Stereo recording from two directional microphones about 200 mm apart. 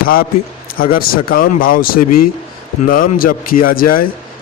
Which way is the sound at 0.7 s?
45° left (ahead or behind).